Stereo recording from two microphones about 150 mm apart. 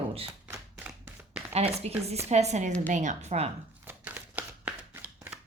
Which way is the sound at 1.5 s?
45° right (ahead or behind).